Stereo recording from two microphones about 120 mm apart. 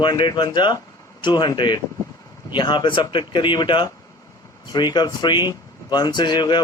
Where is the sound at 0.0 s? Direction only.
40° left (ahead or behind).